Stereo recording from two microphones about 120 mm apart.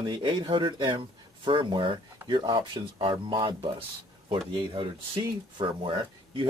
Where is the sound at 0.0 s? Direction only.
45° right (ahead or behind).